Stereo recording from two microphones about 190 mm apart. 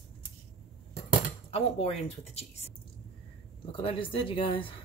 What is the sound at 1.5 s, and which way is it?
A woman's voice, 30° left (ahead or behind).